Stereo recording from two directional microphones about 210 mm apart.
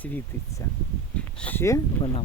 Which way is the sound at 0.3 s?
10° left (ahead or behind).